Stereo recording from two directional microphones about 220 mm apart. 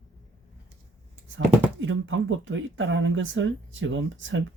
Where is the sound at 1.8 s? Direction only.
60° right (ahead or behind).